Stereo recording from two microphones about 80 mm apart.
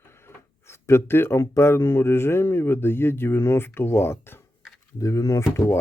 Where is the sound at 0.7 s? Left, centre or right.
Left.